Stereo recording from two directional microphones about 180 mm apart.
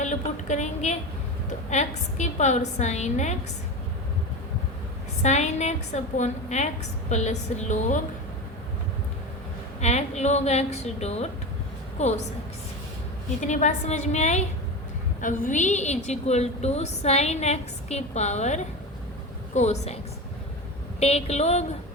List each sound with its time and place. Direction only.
0.0 s a woman's voice: 40° left (ahead or behind)
5.2 s a woman's voice: 40° left (ahead or behind)
9.8 s a woman's voice: 40° left (ahead or behind)
13.4 s a woman's voice: 40° left (ahead or behind)
21.0 s a woman's voice: 35° left (ahead or behind)